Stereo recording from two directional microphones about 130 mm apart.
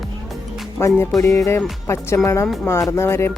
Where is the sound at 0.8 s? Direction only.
20° left (ahead or behind).